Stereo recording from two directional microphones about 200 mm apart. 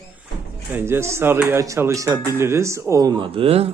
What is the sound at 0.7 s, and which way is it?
A man's voice, 10° right (ahead or behind).